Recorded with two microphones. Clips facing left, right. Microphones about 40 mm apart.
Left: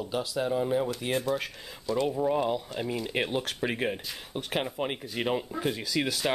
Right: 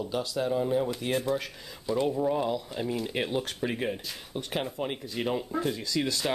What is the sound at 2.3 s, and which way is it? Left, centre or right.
Speech, centre.